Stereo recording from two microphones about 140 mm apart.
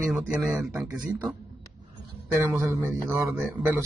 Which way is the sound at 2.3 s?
20° right (ahead or behind).